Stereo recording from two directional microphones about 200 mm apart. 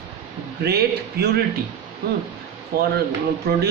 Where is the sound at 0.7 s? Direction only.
55° right (ahead or behind).